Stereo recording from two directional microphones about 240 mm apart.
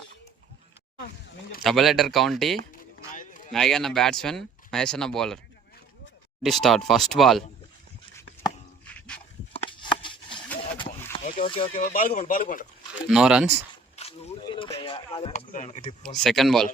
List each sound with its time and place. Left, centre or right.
1.6 s speech: centre
3.2 s a sound: left
3.5 s speech: centre
6.4 s speech: centre
8.1 s chopping: centre
9.5 s a sound: left
11.4 s speech: left
11.7 s speech: left
13.1 s speech: centre
13.9 s a sound: left
16.0 s speech: centre